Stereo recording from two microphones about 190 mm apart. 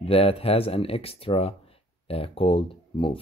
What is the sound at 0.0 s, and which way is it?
Speech, 30° left (ahead or behind).